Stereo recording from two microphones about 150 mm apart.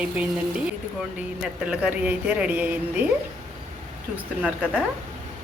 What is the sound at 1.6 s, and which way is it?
Speech, 5° right (ahead or behind).